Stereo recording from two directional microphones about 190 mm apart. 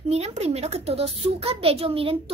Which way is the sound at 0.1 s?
35° right (ahead or behind).